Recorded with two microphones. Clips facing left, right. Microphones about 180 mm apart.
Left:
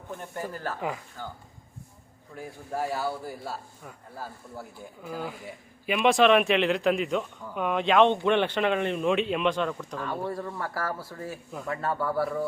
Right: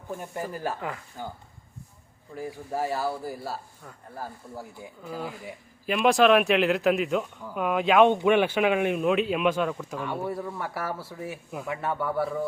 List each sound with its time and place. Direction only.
0.1 s speech: 10° right (ahead or behind)
2.3 s speech: centre (ahead or behind)
5.0 s speech: centre (ahead or behind)